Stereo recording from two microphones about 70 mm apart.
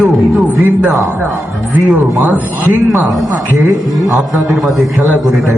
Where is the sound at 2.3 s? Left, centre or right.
Right.